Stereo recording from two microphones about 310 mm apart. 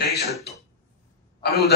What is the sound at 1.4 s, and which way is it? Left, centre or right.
Speech, left.